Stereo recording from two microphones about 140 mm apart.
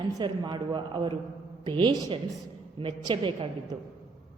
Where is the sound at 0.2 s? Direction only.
35° right (ahead or behind).